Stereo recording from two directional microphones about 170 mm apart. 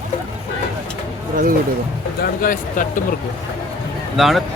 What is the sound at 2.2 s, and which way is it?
Speech, 55° left (ahead or behind).